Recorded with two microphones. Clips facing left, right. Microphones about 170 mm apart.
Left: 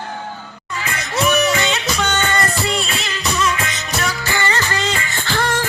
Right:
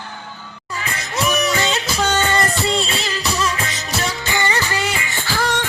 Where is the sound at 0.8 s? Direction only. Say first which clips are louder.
Left 3 dB; 30° right (ahead or behind).